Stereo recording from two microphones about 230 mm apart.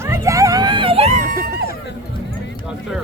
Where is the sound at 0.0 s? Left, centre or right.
Centre; by 1.6 s right.